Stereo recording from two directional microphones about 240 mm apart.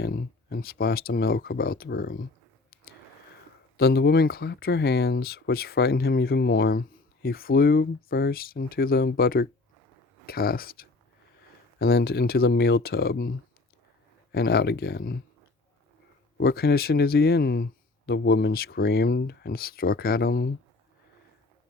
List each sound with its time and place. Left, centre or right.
0.0 s speech: left
3.8 s speech: left
14.3 s speech: left
16.4 s speech: left